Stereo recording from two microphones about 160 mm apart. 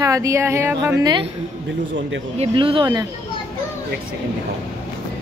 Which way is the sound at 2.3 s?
35° right (ahead or behind).